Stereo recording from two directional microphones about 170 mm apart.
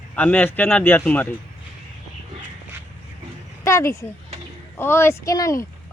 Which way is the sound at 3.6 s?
15° left (ahead or behind).